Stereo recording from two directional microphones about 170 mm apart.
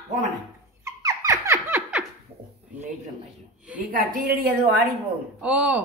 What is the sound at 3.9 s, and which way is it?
Speech, 55° right (ahead or behind).